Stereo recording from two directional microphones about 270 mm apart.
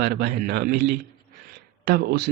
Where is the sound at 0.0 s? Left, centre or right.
Right.